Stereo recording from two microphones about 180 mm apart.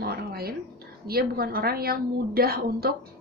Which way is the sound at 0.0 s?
60° right (ahead or behind).